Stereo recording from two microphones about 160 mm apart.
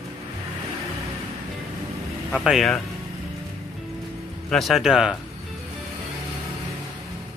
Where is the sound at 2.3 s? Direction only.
Centre (ahead or behind).